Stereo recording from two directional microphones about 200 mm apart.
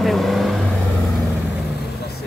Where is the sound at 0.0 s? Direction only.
Centre (ahead or behind).